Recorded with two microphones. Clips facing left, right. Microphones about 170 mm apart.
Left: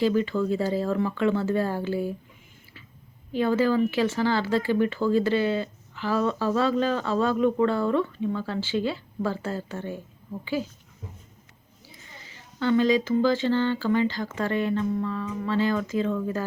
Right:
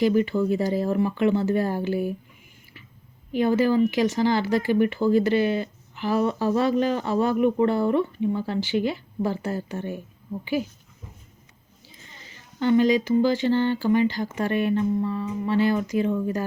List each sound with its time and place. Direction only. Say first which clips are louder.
0.0 s speech: right 2 dB; 15° right (ahead or behind)
3.3 s speech: right 2 dB; 15° right (ahead or behind)
12.5 s speech: right 2 dB; 15° right (ahead or behind)